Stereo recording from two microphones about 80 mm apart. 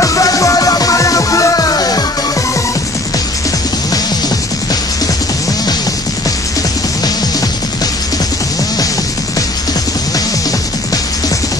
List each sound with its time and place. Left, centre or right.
0.0 s music: left